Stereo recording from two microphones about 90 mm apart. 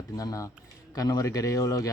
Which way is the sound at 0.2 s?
40° left (ahead or behind).